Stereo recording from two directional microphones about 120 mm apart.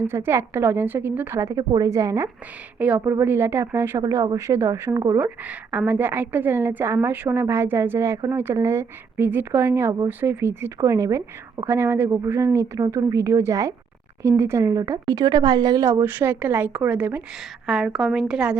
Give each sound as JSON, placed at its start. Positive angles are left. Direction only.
{"t": 0.0, "sound": "a woman's voice", "side_deg": -20}
{"t": 2.7, "sound": "a woman's voice", "side_deg": -15}
{"t": 5.2, "sound": "a woman's voice", "side_deg": -10}